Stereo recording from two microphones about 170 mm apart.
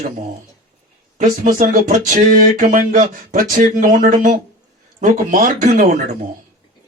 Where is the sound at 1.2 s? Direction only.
50° right (ahead or behind).